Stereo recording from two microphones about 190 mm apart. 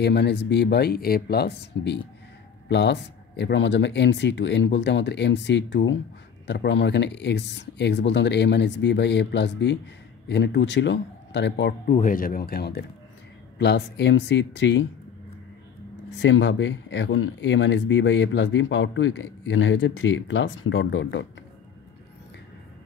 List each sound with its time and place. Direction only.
0.0 s speech: 65° left (ahead or behind)
11.8 s speech: 45° left (ahead or behind); by 14.9 s 70° left (ahead or behind)
16.1 s speech: 75° left (ahead or behind)